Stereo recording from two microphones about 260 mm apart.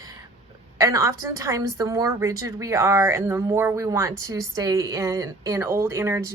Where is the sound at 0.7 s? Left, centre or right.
Centre.